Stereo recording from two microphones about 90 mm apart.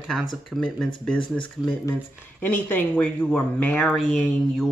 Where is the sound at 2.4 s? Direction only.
20° left (ahead or behind).